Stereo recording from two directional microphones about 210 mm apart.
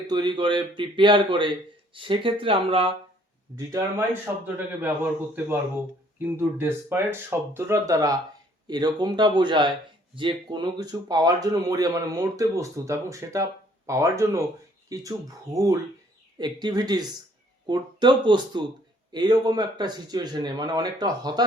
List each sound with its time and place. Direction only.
0.1 s speech: 20° right (ahead or behind)
3.7 s speech: 15° right (ahead or behind)
6.1 s speech: 10° right (ahead or behind)